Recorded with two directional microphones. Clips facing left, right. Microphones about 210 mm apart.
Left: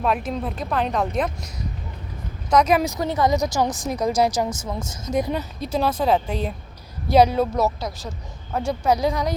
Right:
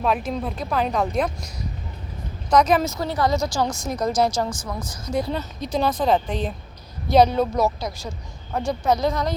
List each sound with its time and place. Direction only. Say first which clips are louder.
0.0 s speech: even; centre (ahead or behind)
2.5 s a woman's voice: even; 5° left (ahead or behind)
4.4 s a woman's voice: left 2 dB; 25° left (ahead or behind)